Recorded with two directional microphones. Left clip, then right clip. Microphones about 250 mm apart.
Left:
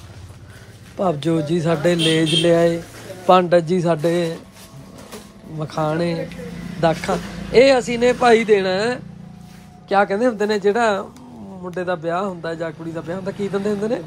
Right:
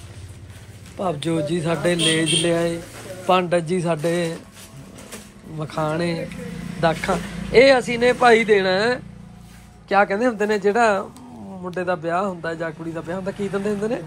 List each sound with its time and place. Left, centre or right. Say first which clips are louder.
0.9 s speech: left 3 dB; centre
5.6 s a man's voice: left 2 dB; centre